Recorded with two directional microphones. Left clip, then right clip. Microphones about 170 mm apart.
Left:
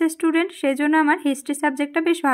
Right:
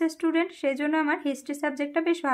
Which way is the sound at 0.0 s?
30° left (ahead or behind).